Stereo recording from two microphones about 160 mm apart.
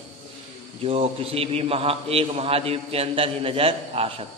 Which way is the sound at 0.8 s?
40° right (ahead or behind).